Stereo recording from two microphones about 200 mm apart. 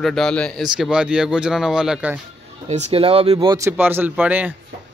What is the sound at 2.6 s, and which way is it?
Speech, 35° right (ahead or behind).